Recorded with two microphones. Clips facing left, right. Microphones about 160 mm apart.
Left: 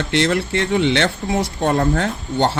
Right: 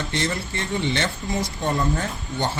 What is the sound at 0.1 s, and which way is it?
Speech, 70° left (ahead or behind).